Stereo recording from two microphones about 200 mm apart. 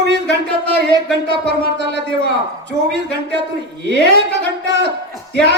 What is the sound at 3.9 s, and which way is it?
A man's voice, 55° right (ahead or behind).